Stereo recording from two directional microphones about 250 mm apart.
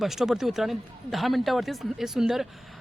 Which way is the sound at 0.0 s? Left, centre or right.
Centre.